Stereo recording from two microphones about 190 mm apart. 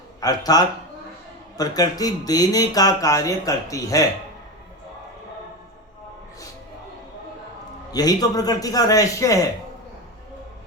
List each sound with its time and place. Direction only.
0.2 s speech: 20° left (ahead or behind)
7.9 s speech: 20° left (ahead or behind)